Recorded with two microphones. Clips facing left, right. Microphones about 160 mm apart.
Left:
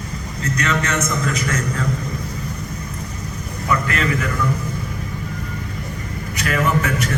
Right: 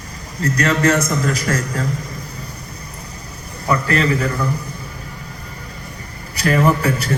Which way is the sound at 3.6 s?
35° right (ahead or behind).